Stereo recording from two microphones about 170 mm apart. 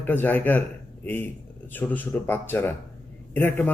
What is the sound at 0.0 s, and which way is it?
Speech, 10° left (ahead or behind).